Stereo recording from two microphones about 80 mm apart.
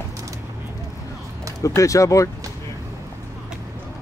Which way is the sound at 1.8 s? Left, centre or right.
Left.